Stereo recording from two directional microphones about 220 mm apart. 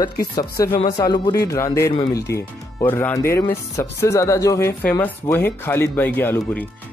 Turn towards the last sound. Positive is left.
turn(degrees=5)  # may be behind; listen again after turning